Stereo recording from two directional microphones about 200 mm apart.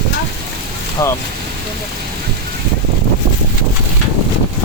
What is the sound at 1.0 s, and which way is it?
Speech, 15° left (ahead or behind).